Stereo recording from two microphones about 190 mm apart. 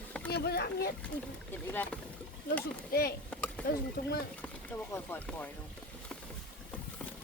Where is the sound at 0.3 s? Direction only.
60° left (ahead or behind).